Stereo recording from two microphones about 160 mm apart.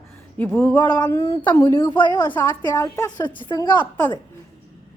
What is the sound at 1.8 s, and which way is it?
Speech, 30° left (ahead or behind).